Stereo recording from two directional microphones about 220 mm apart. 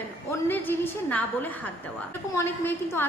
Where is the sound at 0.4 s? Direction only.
10° left (ahead or behind).